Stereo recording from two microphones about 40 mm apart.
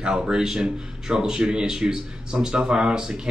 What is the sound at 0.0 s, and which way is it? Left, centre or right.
Speech, centre.